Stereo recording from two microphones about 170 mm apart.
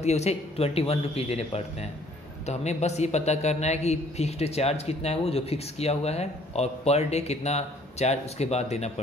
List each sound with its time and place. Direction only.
0.0 s a man's voice: 40° left (ahead or behind)